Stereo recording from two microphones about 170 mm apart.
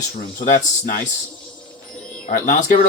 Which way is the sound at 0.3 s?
50° left (ahead or behind).